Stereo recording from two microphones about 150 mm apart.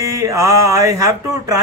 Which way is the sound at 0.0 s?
20° right (ahead or behind).